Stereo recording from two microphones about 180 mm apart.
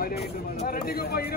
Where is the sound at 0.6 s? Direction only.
50° left (ahead or behind).